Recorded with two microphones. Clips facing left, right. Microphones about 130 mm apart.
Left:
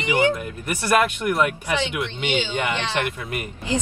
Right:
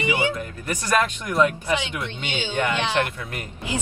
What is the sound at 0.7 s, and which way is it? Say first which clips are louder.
Speech: left 3 dB; 10° left (ahead or behind).